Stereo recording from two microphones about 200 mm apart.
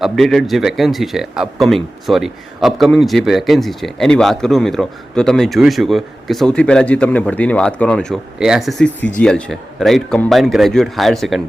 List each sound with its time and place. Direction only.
0.0 s speech: centre (ahead or behind)